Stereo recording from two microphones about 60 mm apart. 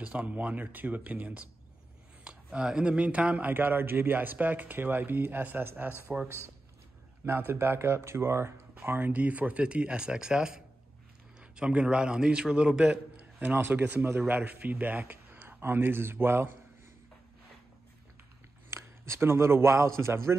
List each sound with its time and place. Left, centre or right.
0.0 s speech: right
2.2 s speech: centre; by 8.5 s right
8.8 s speech: right
9.2 s a man's voice: right
13.4 s speech: right
18.7 s speech: right